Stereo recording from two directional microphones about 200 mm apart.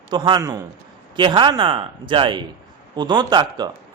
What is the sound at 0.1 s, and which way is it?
Speech, 20° right (ahead or behind).